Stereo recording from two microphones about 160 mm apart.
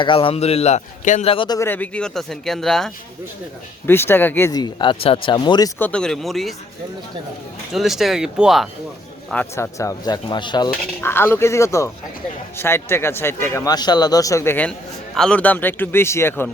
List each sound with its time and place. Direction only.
0.0 s a man's voice: 35° left (ahead or behind)
1.3 s a man's voice: 30° left (ahead or behind)
1.5 s speech: 15° left (ahead or behind)
3.8 s speech: 15° left (ahead or behind)
5.8 s speech: 5° left (ahead or behind)
7.7 s speech: centre (ahead or behind)
9.3 s speech: 10° left (ahead or behind)
9.7 s speech: 20° left (ahead or behind)
10.7 s speech: 15° left (ahead or behind)